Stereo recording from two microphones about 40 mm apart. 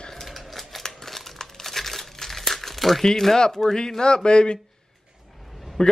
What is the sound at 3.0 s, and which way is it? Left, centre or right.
Speech, centre.